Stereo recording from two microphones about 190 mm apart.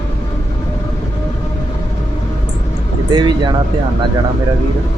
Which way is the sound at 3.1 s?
25° right (ahead or behind).